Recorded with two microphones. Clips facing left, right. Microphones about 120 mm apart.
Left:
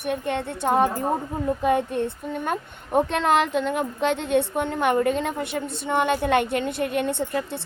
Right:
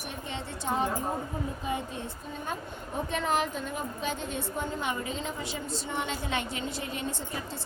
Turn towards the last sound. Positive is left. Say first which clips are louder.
# left 10 dB
turn(degrees=65)  # may be behind; listen again after turning